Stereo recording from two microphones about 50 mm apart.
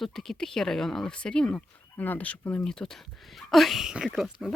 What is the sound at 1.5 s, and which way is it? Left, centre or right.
Speech, left.